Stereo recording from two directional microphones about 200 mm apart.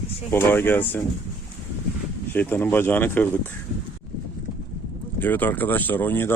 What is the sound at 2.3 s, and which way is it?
Speech, 10° left (ahead or behind).